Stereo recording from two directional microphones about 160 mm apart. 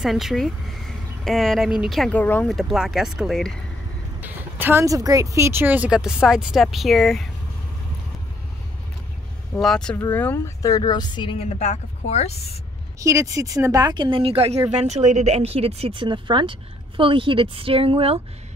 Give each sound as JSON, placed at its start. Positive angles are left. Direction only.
{"t": 0.0, "sound": "speech", "side_deg": 0}
{"t": 4.2, "sound": "speech", "side_deg": -10}
{"t": 9.5, "sound": "speech", "side_deg": 5}
{"t": 9.9, "sound": "speech", "side_deg": 15}
{"t": 11.4, "sound": "a woman's voice", "side_deg": 45}
{"t": 13.0, "sound": "speech", "side_deg": -20}